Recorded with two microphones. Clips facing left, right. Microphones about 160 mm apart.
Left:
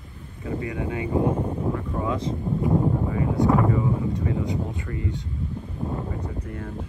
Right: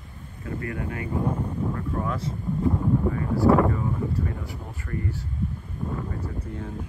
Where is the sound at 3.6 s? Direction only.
Centre (ahead or behind).